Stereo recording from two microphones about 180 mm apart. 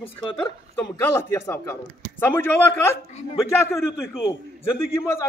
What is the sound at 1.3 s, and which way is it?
A man's voice, 15° left (ahead or behind).